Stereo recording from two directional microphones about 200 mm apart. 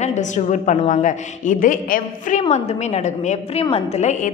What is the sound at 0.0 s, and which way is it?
A woman's voice, 35° left (ahead or behind).